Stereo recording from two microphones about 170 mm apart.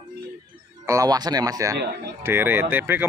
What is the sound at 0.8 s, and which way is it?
Speech, 20° right (ahead or behind).